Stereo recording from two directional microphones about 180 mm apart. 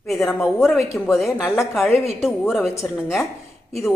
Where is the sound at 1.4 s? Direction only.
10° left (ahead or behind).